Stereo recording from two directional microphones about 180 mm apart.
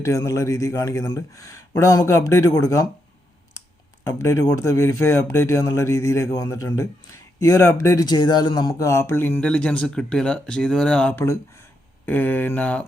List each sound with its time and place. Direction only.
0.0 s speech: 15° left (ahead or behind)
4.0 s speech: 15° left (ahead or behind)